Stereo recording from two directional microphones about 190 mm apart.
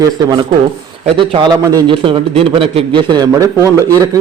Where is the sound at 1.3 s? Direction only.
25° right (ahead or behind).